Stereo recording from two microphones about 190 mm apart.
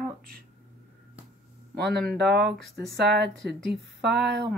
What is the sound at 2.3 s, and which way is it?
Speech, 60° right (ahead or behind).